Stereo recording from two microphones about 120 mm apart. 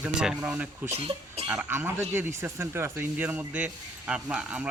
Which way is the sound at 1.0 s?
50° right (ahead or behind).